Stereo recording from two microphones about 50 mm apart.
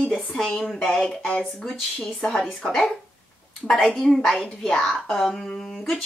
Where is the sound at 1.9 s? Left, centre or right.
Centre.